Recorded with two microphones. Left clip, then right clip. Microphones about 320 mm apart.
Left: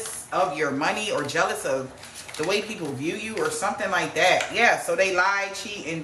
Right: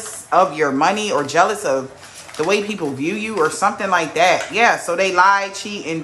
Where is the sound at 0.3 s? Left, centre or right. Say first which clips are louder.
Right 9 dB; centre.